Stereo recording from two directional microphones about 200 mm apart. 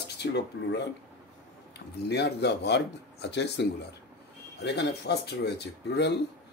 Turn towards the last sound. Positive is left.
turn(degrees=60)  # may be behind; listen again after turning